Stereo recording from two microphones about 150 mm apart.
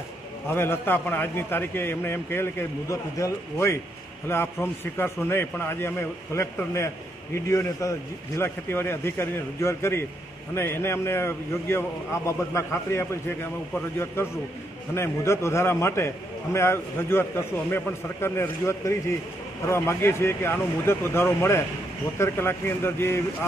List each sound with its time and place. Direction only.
0.5 s a man's voice: 15° left (ahead or behind)
15.0 s a man's voice: 20° left (ahead or behind)